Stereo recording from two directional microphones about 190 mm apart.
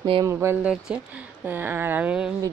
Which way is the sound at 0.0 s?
25° right (ahead or behind).